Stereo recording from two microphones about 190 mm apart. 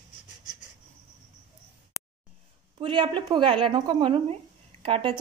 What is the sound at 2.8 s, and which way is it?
Speech, 25° right (ahead or behind).